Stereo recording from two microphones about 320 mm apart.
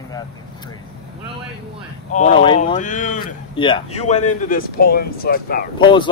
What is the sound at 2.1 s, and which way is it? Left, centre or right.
Speech, left.